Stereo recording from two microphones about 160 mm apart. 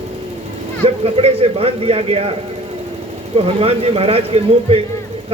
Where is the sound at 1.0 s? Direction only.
40° right (ahead or behind).